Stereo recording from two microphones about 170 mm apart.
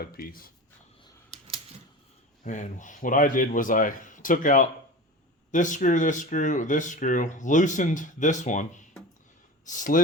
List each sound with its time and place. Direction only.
0.0 s speech: 60° left (ahead or behind)
2.4 s speech: 50° left (ahead or behind)